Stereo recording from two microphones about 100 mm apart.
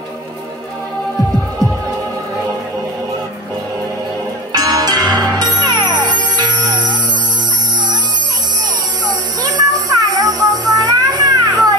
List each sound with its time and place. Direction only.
4.5 s music: 40° right (ahead or behind)
9.0 s music: 40° right (ahead or behind)